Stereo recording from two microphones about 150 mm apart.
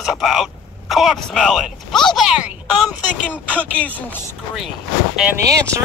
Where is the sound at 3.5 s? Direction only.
10° left (ahead or behind).